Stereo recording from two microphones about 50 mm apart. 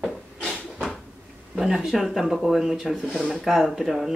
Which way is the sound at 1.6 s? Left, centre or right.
Centre.